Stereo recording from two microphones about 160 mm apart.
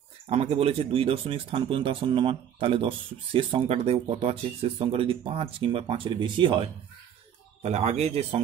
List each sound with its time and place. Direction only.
0.3 s speech: 40° right (ahead or behind)
7.6 s speech: 40° right (ahead or behind)